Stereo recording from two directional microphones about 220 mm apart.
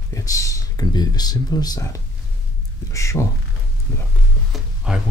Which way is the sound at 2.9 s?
15° left (ahead or behind).